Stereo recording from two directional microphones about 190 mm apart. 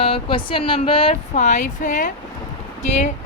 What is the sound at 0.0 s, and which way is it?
A woman's voice, 30° left (ahead or behind).